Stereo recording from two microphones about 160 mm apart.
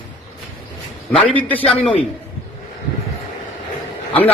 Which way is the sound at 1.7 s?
5° left (ahead or behind).